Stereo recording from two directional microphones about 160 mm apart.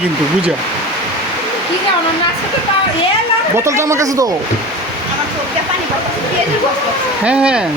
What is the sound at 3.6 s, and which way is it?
Speech, 15° right (ahead or behind).